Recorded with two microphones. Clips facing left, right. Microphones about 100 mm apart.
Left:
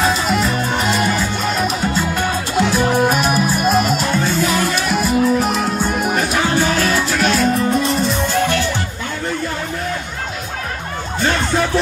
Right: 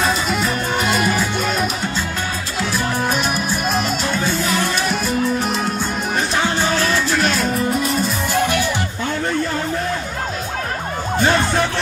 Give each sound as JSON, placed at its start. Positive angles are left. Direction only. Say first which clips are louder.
{"t": 0.0, "sound": "music", "louder": "left 2 dB", "side_deg": 0}
{"t": 2.5, "sound": "music", "louder": "left 7 dB", "side_deg": 20}
{"t": 3.1, "sound": "music", "louder": "left 4 dB", "side_deg": 5}
{"t": 7.2, "sound": "music", "louder": "left 3 dB", "side_deg": 0}
{"t": 8.3, "sound": "music", "louder": "left 1 dB", "side_deg": -15}